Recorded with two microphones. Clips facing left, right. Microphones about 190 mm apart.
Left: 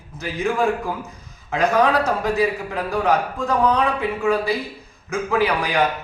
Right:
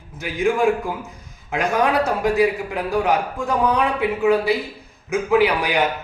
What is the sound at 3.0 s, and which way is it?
A man's voice, 15° right (ahead or behind).